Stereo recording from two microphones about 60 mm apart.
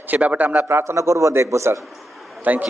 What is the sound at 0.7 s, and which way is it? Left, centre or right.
A man's voice, right.